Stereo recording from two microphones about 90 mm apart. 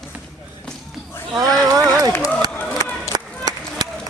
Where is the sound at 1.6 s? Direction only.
45° right (ahead or behind).